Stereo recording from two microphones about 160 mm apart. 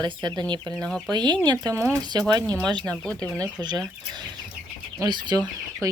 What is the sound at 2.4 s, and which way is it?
Speech, 5° left (ahead or behind).